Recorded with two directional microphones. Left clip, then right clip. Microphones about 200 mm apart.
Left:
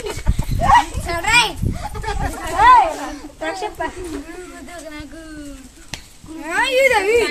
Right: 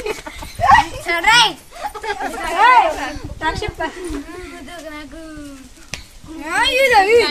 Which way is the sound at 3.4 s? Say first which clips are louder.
Right 2 dB; 50° right (ahead or behind).